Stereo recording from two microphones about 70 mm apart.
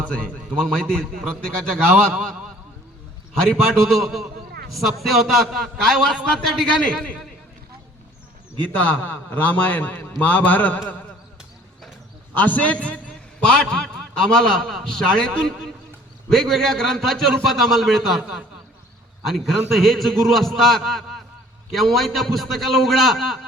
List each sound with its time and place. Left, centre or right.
0.1 s a man's voice: centre
3.5 s a man's voice: centre
8.6 s a man's voice: left
12.3 s a man's voice: left
14.3 s a man's voice: centre
19.3 s a man's voice: centre